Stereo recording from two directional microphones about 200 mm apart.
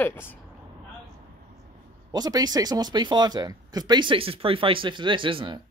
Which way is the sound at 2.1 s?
20° right (ahead or behind).